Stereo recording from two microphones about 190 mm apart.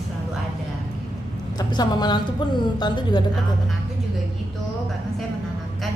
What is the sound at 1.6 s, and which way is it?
A woman's voice, 20° left (ahead or behind).